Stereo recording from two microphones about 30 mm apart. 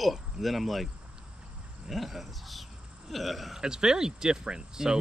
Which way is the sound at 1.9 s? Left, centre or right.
Centre.